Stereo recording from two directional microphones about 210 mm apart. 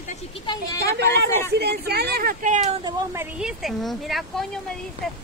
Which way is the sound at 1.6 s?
50° right (ahead or behind).